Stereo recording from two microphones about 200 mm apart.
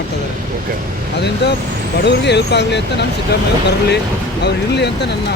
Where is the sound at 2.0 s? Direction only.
60° left (ahead or behind).